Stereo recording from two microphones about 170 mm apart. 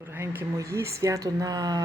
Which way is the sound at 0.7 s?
20° right (ahead or behind).